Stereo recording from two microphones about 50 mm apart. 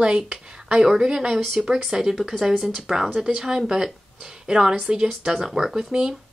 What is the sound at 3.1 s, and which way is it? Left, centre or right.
Speech, centre.